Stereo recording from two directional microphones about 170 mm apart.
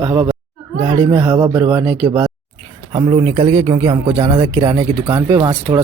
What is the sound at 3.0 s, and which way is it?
Speech, 25° right (ahead or behind).